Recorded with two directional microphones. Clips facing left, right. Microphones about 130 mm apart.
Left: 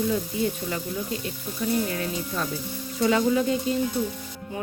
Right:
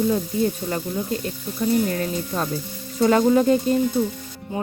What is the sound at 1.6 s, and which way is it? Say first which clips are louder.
Speech: right 5 dB; 40° right (ahead or behind).